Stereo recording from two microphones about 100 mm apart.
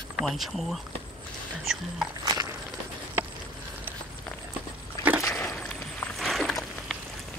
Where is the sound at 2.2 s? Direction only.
40° right (ahead or behind).